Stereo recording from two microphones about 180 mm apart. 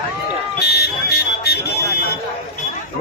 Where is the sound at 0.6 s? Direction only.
65° left (ahead or behind).